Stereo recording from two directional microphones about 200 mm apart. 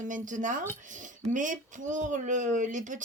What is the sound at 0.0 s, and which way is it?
Speech, 40° right (ahead or behind).